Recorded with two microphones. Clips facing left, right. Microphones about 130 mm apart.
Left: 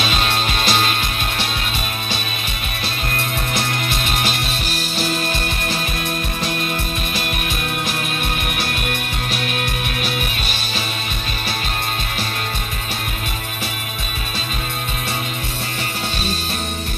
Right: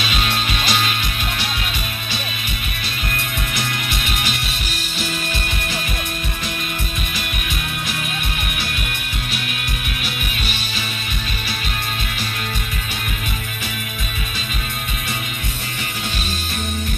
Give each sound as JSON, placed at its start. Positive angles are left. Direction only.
{"t": 0.0, "sound": "music", "side_deg": 35}
{"t": 3.5, "sound": "music", "side_deg": 35}